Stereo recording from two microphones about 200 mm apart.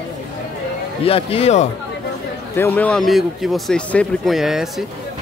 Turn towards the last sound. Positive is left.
turn(degrees=0)  # may be behind; listen again after turning